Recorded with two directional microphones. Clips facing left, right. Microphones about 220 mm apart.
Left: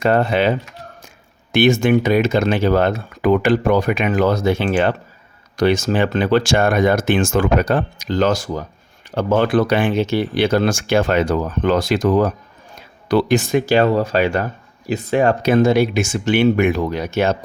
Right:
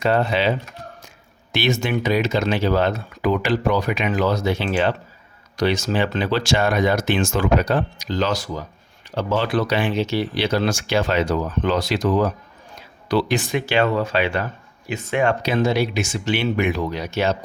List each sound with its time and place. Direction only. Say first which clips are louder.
0.0 s speech: left 3 dB; 50° left (ahead or behind)
1.5 s speech: left 8 dB; 50° left (ahead or behind)